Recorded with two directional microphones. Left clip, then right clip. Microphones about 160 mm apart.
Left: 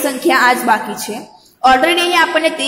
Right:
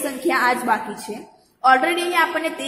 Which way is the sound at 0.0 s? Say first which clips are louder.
Left 7 dB; 15° left (ahead or behind).